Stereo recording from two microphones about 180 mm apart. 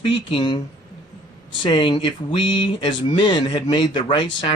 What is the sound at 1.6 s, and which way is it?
Speech, 25° left (ahead or behind).